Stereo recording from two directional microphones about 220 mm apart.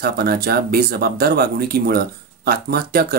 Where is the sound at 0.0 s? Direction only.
45° right (ahead or behind).